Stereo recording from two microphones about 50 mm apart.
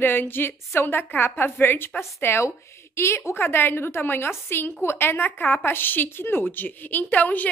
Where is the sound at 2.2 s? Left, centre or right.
Left.